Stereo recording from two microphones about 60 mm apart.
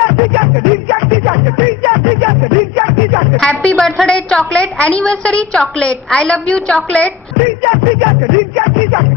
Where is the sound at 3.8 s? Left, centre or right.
Centre.